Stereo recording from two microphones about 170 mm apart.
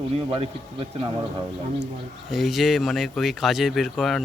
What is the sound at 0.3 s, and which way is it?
Speech, 30° right (ahead or behind).